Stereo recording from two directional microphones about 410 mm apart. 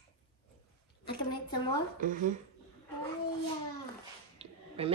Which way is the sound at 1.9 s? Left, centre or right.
Centre.